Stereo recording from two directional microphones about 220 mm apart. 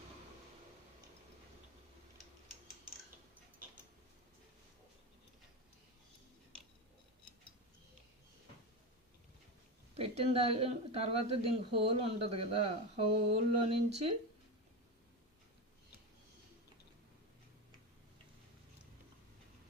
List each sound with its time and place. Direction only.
10.0 s speech: 25° right (ahead or behind)